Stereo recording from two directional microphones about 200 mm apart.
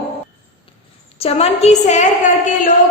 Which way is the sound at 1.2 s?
30° left (ahead or behind).